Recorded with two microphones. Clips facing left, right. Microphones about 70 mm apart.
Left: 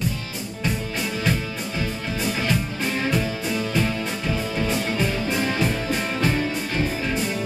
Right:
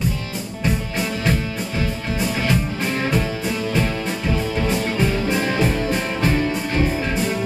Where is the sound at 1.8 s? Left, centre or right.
Centre.